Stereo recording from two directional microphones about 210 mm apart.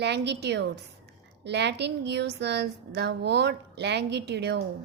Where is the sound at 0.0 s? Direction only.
55° right (ahead or behind).